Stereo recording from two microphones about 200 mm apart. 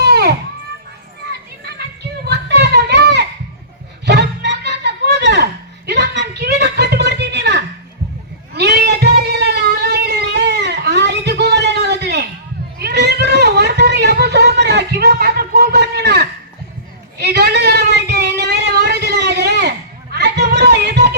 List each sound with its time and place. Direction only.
0.0 s children playing: 55° right (ahead or behind)
2.2 s a sound: 55° right (ahead or behind)
20.1 s music: 55° right (ahead or behind)